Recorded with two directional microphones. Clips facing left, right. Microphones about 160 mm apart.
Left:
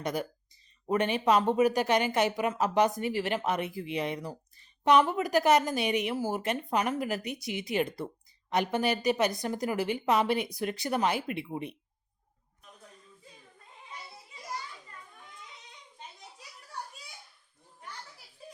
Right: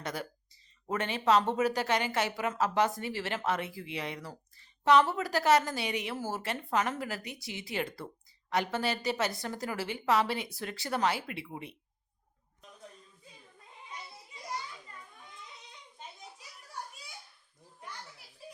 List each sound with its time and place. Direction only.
0.0 s speech: 15° left (ahead or behind)